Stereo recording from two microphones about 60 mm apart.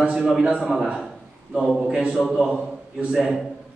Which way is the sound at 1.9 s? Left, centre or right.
Centre.